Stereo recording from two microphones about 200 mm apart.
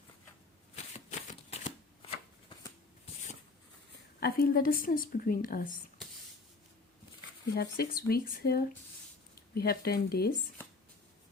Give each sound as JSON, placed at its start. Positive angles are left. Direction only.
{"t": 0.9, "sound": "shuffling cards", "side_deg": 35}
{"t": 4.2, "sound": "a woman's voice", "side_deg": 45}
{"t": 7.5, "sound": "a woman's voice", "side_deg": 50}